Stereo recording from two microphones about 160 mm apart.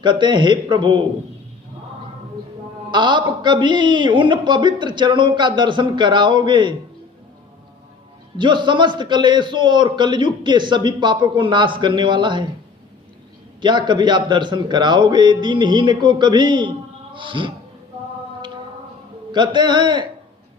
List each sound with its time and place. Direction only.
0.0 s a man's voice: 30° right (ahead or behind)
2.9 s a man's voice: 30° right (ahead or behind)
8.4 s a man's voice: 30° right (ahead or behind)
13.6 s a man's voice: 30° right (ahead or behind)
19.3 s a man's voice: 30° right (ahead or behind)